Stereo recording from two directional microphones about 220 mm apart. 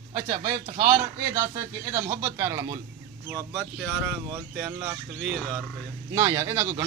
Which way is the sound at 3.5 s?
5° left (ahead or behind).